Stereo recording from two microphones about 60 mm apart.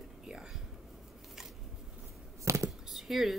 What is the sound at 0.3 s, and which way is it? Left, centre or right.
Whispering, centre.